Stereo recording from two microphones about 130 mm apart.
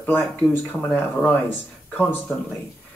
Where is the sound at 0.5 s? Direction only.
15° left (ahead or behind).